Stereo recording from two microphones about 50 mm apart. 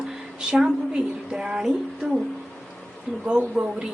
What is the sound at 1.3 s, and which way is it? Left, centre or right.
Speech, centre.